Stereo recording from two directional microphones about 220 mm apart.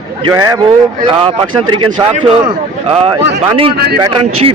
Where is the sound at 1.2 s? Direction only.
20° right (ahead or behind).